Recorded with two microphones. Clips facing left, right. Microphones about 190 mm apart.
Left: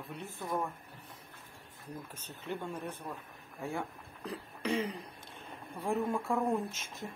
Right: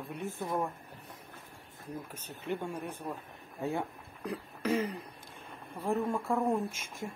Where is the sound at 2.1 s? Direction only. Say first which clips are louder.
Right 4 dB; 15° right (ahead or behind).